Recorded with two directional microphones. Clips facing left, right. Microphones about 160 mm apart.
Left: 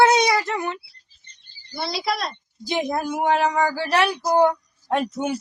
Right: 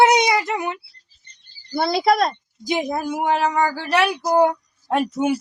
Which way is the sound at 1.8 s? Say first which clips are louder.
Right 8 dB; 50° right (ahead or behind).